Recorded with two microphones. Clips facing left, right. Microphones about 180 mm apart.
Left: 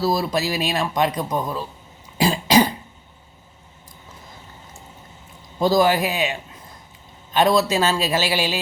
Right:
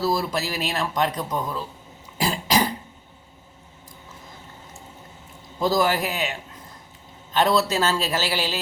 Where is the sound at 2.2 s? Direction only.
20° left (ahead or behind).